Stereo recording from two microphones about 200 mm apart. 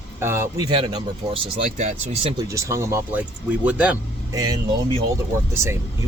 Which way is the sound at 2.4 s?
15° right (ahead or behind).